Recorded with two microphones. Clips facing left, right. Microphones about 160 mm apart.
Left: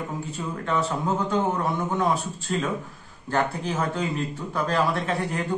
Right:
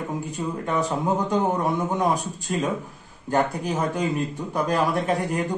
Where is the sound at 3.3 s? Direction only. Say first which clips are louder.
Right 2 dB; 15° right (ahead or behind).